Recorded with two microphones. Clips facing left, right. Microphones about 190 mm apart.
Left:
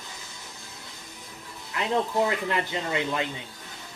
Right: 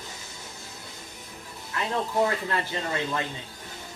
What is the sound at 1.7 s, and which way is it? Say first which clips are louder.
Speech: left 1 dB; 20° left (ahead or behind).